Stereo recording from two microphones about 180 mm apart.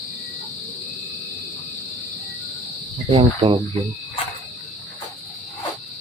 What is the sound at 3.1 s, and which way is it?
Cricket, 30° right (ahead or behind).